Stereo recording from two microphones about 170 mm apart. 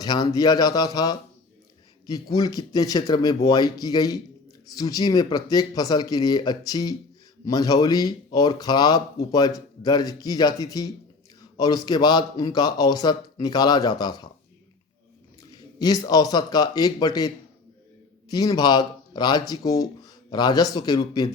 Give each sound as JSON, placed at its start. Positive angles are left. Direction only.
{"t": 0.0, "sound": "speech", "side_deg": 25}
{"t": 15.8, "sound": "speech", "side_deg": 25}